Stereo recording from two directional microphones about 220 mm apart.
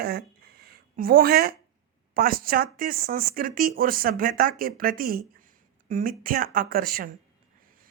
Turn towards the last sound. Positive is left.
turn(degrees=-40)  # may be behind; listen again after turning